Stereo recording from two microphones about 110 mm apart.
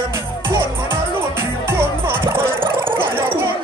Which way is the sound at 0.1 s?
20° right (ahead or behind).